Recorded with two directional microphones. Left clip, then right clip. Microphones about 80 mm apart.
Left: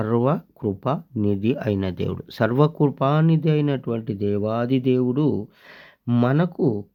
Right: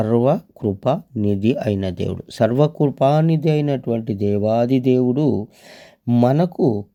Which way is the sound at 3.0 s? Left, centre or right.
Right.